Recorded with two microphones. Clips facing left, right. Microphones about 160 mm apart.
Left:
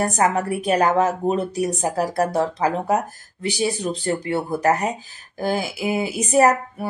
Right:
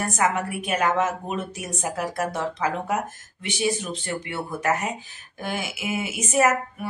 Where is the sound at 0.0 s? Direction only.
35° left (ahead or behind).